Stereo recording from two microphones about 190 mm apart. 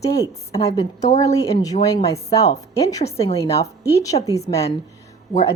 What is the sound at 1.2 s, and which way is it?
A woman's voice, 15° left (ahead or behind).